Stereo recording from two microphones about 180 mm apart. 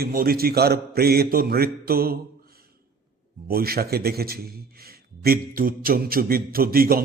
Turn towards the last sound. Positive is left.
turn(degrees=-55)  # may be behind; listen again after turning